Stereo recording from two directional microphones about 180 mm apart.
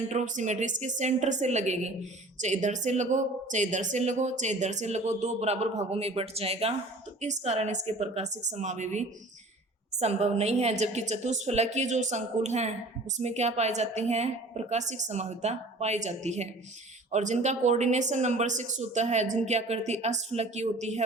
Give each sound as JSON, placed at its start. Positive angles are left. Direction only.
{"t": 0.1, "sound": "a woman's voice", "side_deg": -40}